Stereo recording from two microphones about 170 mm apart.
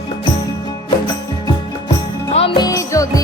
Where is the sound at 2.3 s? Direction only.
35° left (ahead or behind).